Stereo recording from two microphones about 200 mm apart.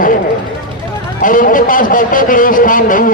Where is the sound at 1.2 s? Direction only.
40° left (ahead or behind).